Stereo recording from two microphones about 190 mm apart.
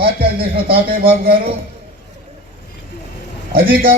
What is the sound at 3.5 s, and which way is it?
Speech, 50° right (ahead or behind).